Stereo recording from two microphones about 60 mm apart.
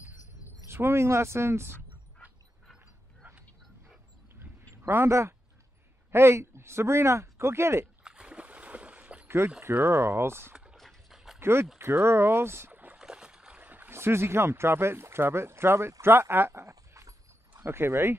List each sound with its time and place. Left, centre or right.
0.7 s speech: right
4.8 s speech: right
8.0 s boat: centre
9.6 s speech: right
10.5 s a sound: centre
10.8 s dog: centre
11.3 s a sound: right
11.8 s speech: right
12.7 s rowboat: right
13.0 s boat: centre
13.6 s a sound: right
13.9 s speech: right
17.6 s speech: right